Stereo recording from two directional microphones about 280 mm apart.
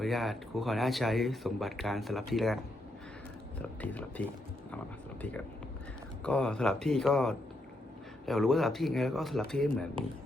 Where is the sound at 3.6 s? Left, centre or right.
Centre.